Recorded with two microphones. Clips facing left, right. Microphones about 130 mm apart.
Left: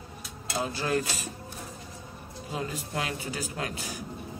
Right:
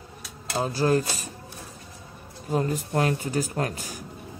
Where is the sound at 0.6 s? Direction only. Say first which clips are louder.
Right 6 dB; 40° right (ahead or behind).